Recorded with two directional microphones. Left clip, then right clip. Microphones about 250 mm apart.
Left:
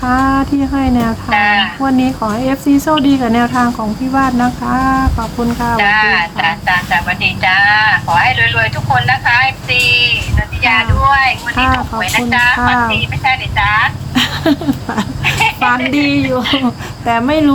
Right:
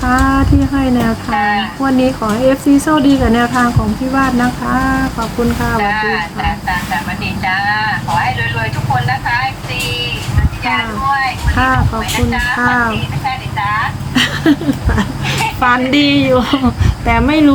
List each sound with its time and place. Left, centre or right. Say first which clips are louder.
0.0 s speech: even; centre
1.3 s speech: left 5 dB; left
1.8 s speech: right 1 dB; centre
5.8 s speech: left 7 dB; left
7.2 s vehicle: left 7 dB; left
10.6 s a sound: left 5 dB; left
11.5 s speech: right 3 dB; centre
11.9 s speech: left 4 dB; left
12.7 s speech: left 1 dB; centre
13.2 s a sound: left 4 dB; left
14.1 s a sound: right 1 dB; centre
15.6 s a woman's voice: right 1 dB; centre